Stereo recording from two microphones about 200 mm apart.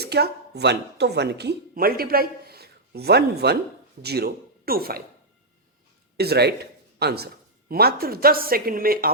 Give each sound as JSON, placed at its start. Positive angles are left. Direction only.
{"t": 0.0, "sound": "speech", "side_deg": -55}
{"t": 6.1, "sound": "speech", "side_deg": -55}